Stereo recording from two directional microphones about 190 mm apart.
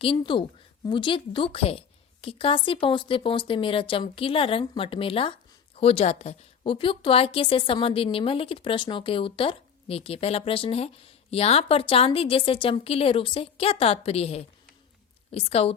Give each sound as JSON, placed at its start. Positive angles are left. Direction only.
{"t": 0.0, "sound": "a woman's voice", "side_deg": 25}